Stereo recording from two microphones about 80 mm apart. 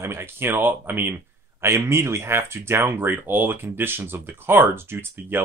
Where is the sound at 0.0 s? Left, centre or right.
Right.